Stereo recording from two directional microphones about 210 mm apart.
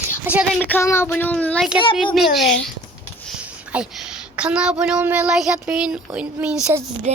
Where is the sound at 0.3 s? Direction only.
5° right (ahead or behind).